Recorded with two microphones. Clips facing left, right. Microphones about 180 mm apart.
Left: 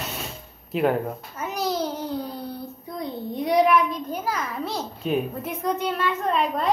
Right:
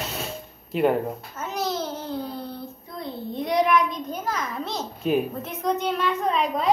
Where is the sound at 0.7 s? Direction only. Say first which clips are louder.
Right 1 dB; centre (ahead or behind).